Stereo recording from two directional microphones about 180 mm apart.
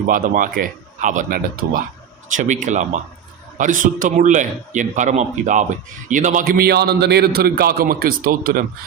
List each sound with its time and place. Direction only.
0.1 s speech: 50° right (ahead or behind)